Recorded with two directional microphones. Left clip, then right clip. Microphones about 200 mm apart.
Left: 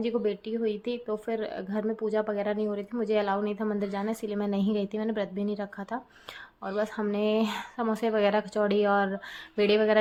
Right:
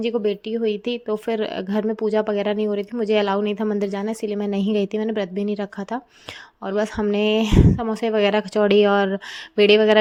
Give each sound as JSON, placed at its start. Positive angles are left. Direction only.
{"t": 0.0, "sound": "speech", "side_deg": -35}